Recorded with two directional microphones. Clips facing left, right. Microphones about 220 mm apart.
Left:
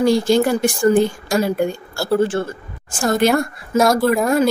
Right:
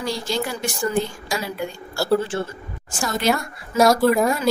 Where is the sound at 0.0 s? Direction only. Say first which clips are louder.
Left 11 dB; 50° left (ahead or behind).